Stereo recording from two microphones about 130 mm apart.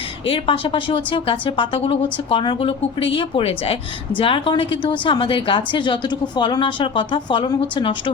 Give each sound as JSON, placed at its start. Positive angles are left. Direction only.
{"t": 0.3, "sound": "a woman's voice", "side_deg": 40}